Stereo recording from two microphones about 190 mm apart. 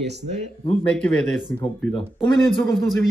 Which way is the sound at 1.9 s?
25° left (ahead or behind).